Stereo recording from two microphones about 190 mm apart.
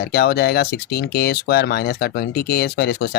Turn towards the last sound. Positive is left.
turn(degrees=55)  # may be behind; listen again after turning